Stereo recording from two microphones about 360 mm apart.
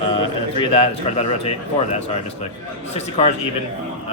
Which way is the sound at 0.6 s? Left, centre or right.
Centre.